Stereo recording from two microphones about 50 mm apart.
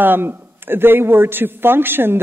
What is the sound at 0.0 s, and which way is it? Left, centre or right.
A woman's voice, right.